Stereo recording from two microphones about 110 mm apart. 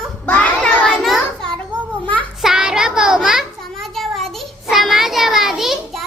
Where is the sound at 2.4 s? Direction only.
5° right (ahead or behind).